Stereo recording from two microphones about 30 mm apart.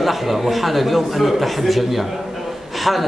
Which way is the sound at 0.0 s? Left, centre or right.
Centre.